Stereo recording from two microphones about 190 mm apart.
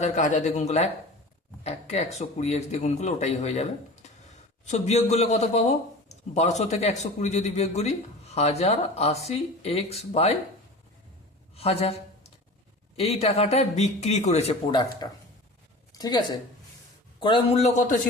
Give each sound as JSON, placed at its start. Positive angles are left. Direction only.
{"t": 0.0, "sound": "a man's voice", "side_deg": 40}
{"t": 11.5, "sound": "a sound", "side_deg": 30}
{"t": 13.0, "sound": "a man's voice", "side_deg": 35}
{"t": 15.0, "sound": "a woman's voice", "side_deg": 20}